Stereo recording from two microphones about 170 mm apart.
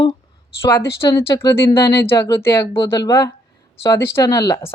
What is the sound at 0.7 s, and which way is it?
A man's voice, 15° left (ahead or behind).